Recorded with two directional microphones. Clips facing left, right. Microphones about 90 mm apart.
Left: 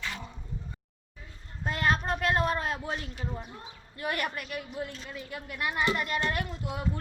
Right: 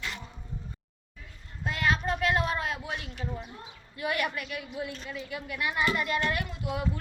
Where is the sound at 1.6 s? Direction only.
40° left (ahead or behind).